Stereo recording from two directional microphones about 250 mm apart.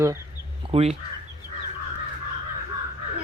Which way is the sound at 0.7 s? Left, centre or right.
Right.